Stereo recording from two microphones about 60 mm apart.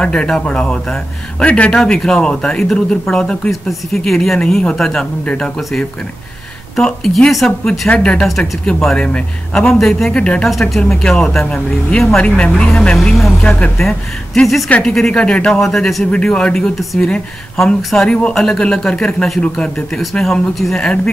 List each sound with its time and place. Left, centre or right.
0.0 s speech: centre
5.2 s speech: centre
5.6 s speech: centre
7.9 s speech: centre
8.2 s speech: centre
8.9 s speech: centre
10.1 s speech: centre
10.4 s speech: centre
13.4 s speech: centre
13.7 s speech: centre
15.6 s speech: centre
20.8 s speech: centre